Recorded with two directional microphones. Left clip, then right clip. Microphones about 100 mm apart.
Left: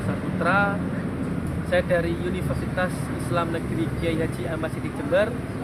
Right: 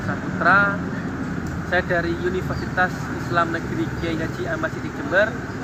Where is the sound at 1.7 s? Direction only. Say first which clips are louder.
Right 1 dB; 50° left (ahead or behind).